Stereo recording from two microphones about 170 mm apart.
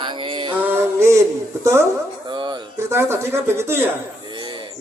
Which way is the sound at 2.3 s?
25° right (ahead or behind).